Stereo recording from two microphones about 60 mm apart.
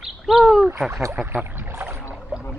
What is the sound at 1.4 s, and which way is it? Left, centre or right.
Rowboat, right.